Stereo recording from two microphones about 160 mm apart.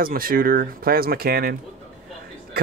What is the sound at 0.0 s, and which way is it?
Speech, 65° right (ahead or behind).